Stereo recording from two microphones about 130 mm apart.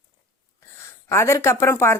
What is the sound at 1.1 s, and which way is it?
Speech, 20° left (ahead or behind).